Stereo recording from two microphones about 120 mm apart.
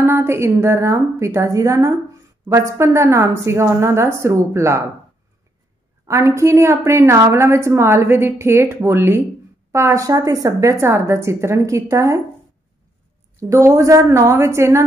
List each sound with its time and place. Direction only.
0.0 s a woman's voice: 20° right (ahead or behind)
6.0 s a woman's voice: 25° right (ahead or behind)
13.4 s a woman's voice: 25° right (ahead or behind)